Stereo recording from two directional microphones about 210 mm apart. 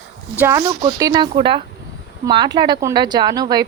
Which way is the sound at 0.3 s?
10° right (ahead or behind).